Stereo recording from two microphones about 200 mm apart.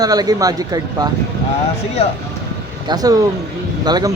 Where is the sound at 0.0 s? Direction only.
20° right (ahead or behind).